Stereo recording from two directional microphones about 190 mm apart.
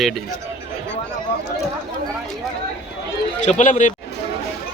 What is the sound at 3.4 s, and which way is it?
Speech, 40° left (ahead or behind).